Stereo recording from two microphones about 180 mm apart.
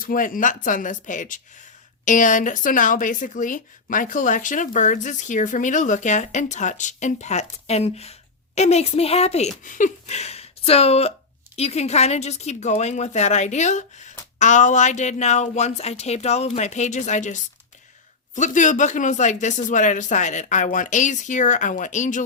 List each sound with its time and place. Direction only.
0.0 s speech: 50° left (ahead or behind)